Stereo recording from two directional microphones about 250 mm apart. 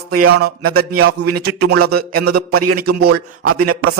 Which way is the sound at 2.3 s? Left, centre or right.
Right.